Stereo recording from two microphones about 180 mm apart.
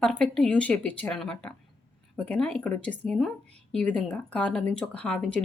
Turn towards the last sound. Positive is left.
turn(degrees=5)  # may be behind; listen again after turning